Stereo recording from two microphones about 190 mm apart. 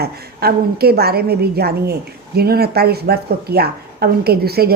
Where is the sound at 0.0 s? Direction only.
55° right (ahead or behind).